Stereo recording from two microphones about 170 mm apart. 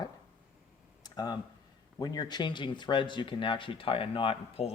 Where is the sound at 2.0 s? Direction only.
25° left (ahead or behind).